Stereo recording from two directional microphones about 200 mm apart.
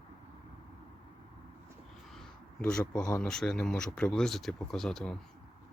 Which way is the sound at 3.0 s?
5° left (ahead or behind).